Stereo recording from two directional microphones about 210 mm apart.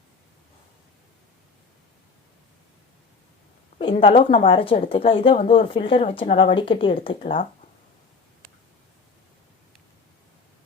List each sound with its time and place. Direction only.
3.8 s speech: 25° left (ahead or behind)